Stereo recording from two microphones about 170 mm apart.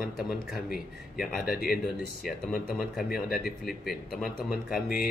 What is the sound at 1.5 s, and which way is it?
Speech, 60° left (ahead or behind).